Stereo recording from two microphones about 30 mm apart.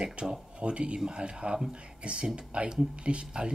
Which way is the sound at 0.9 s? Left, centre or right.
Right.